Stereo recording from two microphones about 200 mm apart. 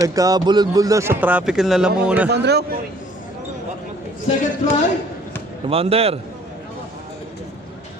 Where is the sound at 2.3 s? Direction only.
55° right (ahead or behind).